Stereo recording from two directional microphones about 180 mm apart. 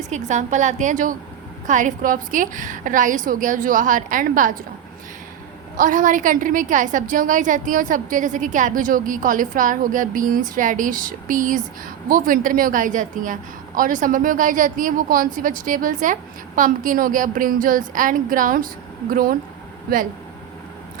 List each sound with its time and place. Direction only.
0.1 s a woman's voice: 40° right (ahead or behind)
5.7 s a woman's voice: 45° right (ahead or behind)